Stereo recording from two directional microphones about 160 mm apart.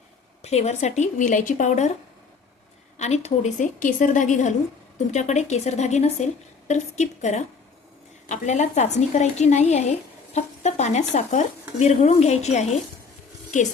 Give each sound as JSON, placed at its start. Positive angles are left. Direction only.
{"t": 0.4, "sound": "a woman's voice", "side_deg": 45}
{"t": 3.0, "sound": "a woman's voice", "side_deg": 45}